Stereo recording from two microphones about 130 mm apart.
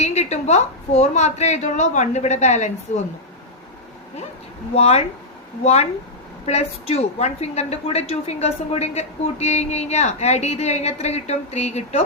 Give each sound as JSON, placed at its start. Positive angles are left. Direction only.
{"t": 0.0, "sound": "a woman's voice", "side_deg": 60}
{"t": 4.7, "sound": "a woman's voice", "side_deg": 50}